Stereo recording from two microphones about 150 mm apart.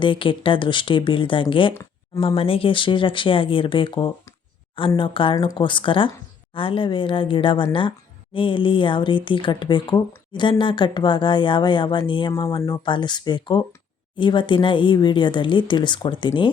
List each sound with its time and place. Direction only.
0.0 s speech: 35° left (ahead or behind)
1.7 s a sound: 20° left (ahead or behind)
2.2 s speech: 40° left (ahead or behind)